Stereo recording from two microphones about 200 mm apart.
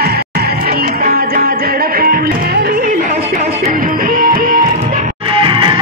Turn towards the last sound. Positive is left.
turn(degrees=-25)  # may be behind; listen again after turning